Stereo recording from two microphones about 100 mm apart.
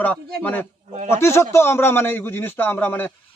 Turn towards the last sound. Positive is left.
turn(degrees=20)  # may be behind; listen again after turning